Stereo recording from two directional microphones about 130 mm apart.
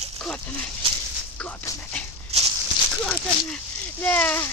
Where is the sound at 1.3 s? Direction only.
10° left (ahead or behind).